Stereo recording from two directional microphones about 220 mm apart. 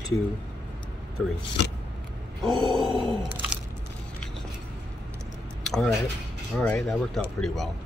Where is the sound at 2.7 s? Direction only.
20° right (ahead or behind).